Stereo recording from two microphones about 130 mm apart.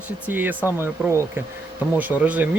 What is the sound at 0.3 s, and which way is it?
Speech, 15° right (ahead or behind).